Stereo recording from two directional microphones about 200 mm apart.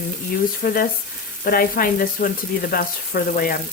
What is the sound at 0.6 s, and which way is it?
Frying, 45° left (ahead or behind).